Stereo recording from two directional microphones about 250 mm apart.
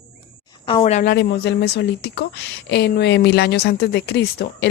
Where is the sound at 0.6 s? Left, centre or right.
Left.